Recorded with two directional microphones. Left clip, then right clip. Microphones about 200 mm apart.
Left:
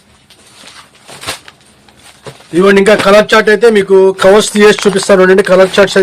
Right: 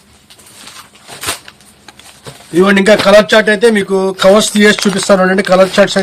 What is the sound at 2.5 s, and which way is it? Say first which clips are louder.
Speech: left 2 dB; 50° left (ahead or behind).